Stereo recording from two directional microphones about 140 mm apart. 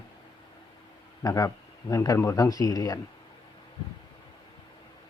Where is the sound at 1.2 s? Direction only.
25° left (ahead or behind).